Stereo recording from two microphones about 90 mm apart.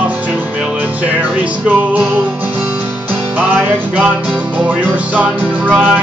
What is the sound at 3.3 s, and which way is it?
Music, 20° right (ahead or behind).